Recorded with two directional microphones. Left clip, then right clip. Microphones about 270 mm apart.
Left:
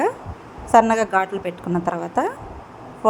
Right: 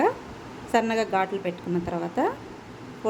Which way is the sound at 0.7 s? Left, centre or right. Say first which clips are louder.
Left 9 dB; centre.